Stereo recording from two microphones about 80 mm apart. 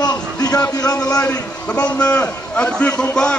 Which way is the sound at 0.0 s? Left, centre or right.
Left.